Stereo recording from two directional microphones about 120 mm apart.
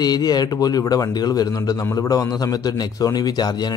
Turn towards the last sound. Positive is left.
turn(degrees=35)  # may be behind; listen again after turning